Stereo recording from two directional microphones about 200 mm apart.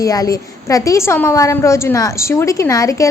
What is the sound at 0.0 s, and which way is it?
A woman's voice, 15° left (ahead or behind).